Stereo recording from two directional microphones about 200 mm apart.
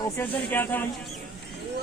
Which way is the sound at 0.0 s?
10° left (ahead or behind).